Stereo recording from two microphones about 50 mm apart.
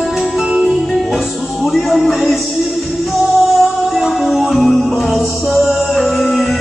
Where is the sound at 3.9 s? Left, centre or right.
Centre.